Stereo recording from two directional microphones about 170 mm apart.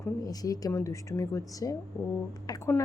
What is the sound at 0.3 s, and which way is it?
A woman's voice, 20° left (ahead or behind).